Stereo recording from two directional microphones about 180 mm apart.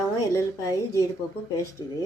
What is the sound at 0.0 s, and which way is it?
A woman's voice, 15° left (ahead or behind).